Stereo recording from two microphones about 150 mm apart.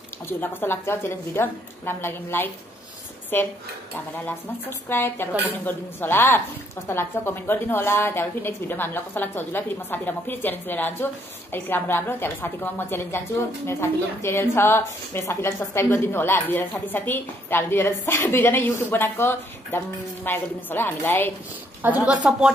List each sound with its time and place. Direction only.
0.3 s a woman's voice: 15° left (ahead or behind)
22.0 s speech: 5° right (ahead or behind)